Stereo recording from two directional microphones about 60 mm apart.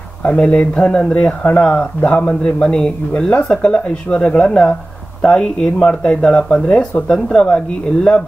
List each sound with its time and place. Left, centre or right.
0.2 s speech: left